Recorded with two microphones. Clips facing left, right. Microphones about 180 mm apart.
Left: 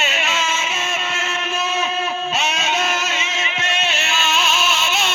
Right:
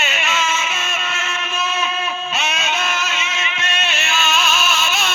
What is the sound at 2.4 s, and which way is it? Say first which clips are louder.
Music: left 2 dB; 40° left (ahead or behind).